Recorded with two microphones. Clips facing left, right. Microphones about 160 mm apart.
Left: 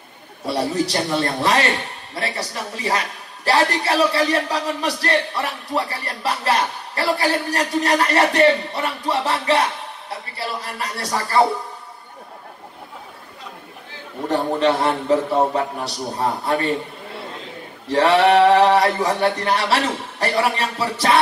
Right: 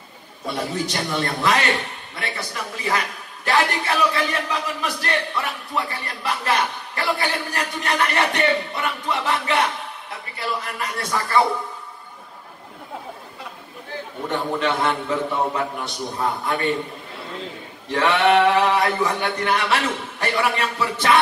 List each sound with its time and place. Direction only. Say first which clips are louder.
0.5 s speech: left 5 dB; 35° left (ahead or behind)
14.3 s speech: left 5 dB; 35° left (ahead or behind)
17.9 s speech: left 3 dB; 35° left (ahead or behind)